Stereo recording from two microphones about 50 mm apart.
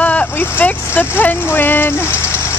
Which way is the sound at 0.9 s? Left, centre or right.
Left.